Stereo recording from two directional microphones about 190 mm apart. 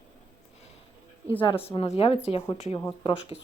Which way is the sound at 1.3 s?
25° left (ahead or behind).